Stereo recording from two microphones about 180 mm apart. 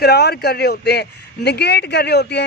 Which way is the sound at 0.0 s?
65° left (ahead or behind).